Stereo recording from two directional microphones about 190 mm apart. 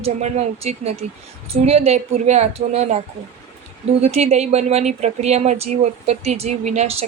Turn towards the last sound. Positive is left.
turn(degrees=-35)  # may be behind; listen again after turning